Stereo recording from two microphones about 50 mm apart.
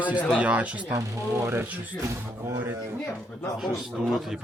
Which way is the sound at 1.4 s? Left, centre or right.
Right.